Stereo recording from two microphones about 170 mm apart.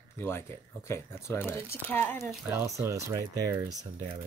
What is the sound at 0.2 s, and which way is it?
Speech, 15° left (ahead or behind).